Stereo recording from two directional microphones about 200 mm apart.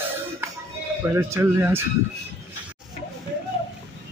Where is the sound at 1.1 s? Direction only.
15° right (ahead or behind).